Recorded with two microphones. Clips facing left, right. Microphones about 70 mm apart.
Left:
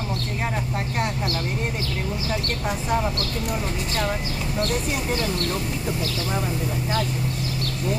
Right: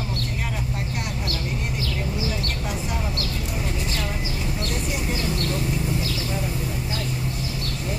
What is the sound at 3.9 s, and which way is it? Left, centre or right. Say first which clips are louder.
Speech: left 3 dB; left.